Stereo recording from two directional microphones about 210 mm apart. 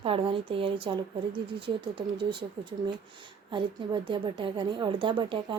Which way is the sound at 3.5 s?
25° right (ahead or behind).